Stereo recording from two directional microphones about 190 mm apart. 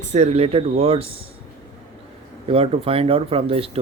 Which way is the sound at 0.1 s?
35° right (ahead or behind).